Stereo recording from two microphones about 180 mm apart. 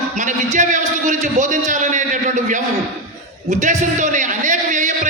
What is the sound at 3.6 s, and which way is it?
Speech, 45° right (ahead or behind).